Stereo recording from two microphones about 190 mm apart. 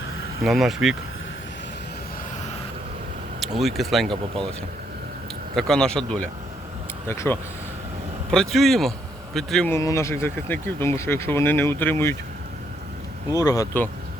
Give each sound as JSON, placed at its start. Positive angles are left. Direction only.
{"t": 0.4, "sound": "speech", "side_deg": 0}
{"t": 3.4, "sound": "speech", "side_deg": 0}
{"t": 5.5, "sound": "speech", "side_deg": 5}
{"t": 8.3, "sound": "speech", "side_deg": 0}
{"t": 9.7, "sound": "speech", "side_deg": 15}
{"t": 13.3, "sound": "speech", "side_deg": 20}